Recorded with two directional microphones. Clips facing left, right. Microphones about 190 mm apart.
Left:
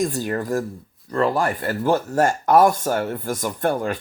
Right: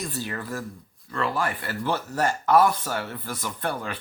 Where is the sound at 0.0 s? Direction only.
45° left (ahead or behind).